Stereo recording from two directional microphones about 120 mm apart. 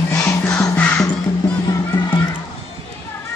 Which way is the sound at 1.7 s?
30° left (ahead or behind).